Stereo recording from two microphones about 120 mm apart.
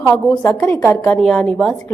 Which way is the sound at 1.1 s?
5° left (ahead or behind).